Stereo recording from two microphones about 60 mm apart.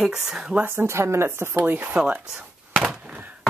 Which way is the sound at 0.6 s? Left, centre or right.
Right.